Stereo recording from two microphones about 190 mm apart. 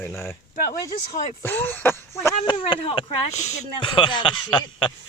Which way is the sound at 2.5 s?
25° left (ahead or behind).